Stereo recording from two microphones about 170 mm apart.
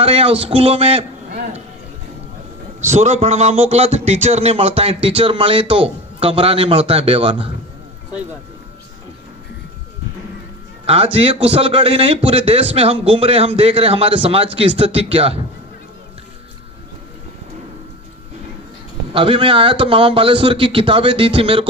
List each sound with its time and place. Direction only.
0.0 s speech: 35° right (ahead or behind)
2.9 s speech: 40° right (ahead or behind)
10.8 s speech: 35° right (ahead or behind)
19.1 s speech: 30° right (ahead or behind)